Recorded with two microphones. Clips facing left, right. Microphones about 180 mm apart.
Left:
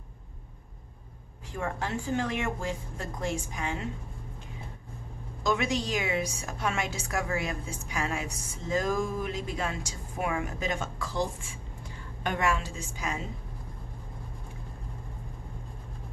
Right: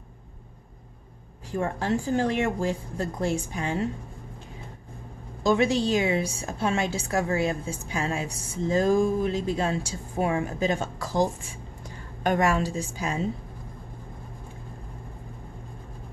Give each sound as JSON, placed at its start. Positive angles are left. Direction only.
{"t": 1.5, "sound": "speech", "side_deg": -35}
{"t": 5.4, "sound": "a woman's voice", "side_deg": -30}